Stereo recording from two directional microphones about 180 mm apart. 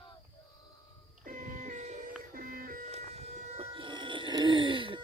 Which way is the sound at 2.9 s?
35° right (ahead or behind).